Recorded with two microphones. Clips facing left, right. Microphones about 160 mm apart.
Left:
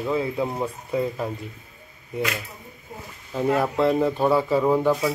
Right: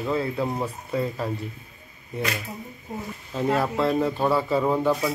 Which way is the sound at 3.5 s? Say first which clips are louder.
Left 2 dB; 20° left (ahead or behind).